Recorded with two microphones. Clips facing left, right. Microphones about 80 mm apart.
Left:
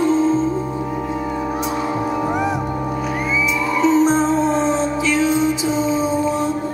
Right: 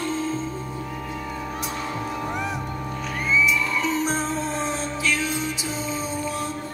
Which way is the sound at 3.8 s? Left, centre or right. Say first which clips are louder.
Left 10 dB; left.